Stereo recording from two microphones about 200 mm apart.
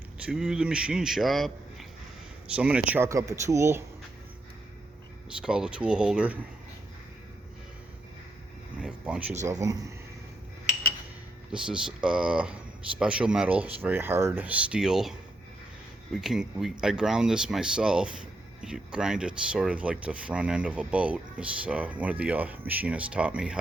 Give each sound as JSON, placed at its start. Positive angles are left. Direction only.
{"t": 0.3, "sound": "speech", "side_deg": -5}
{"t": 5.4, "sound": "speech", "side_deg": -5}
{"t": 8.8, "sound": "a sound", "side_deg": -5}
{"t": 9.5, "sound": "speech", "side_deg": -15}
{"t": 11.5, "sound": "speech", "side_deg": -5}
{"t": 16.1, "sound": "speech", "side_deg": 0}